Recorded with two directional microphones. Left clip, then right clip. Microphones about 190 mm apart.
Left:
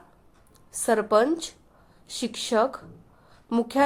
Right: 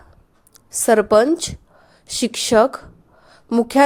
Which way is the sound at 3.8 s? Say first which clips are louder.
Right 8 dB; 30° right (ahead or behind).